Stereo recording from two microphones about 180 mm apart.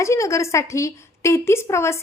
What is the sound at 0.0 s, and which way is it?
A woman's voice, 15° left (ahead or behind).